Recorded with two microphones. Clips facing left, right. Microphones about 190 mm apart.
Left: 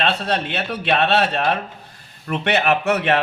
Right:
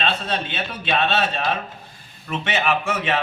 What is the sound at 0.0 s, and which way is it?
A man's voice, 65° left (ahead or behind).